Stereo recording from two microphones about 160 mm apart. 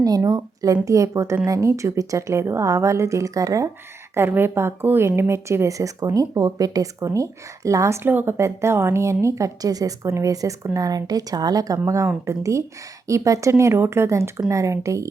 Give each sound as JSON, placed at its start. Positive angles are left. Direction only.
{"t": 0.0, "sound": "speech", "side_deg": -25}